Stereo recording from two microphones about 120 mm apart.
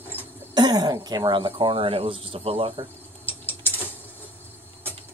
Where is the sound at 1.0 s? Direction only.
35° right (ahead or behind); by 2.9 s 50° right (ahead or behind).